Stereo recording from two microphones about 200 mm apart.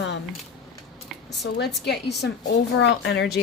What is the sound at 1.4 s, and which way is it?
Speech, 55° left (ahead or behind).